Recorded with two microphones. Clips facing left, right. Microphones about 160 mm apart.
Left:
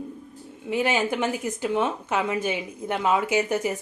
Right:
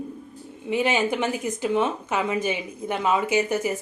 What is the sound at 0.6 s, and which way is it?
A woman's voice, 15° right (ahead or behind).